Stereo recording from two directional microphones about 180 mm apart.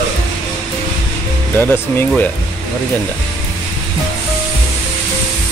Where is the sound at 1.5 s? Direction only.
10° left (ahead or behind).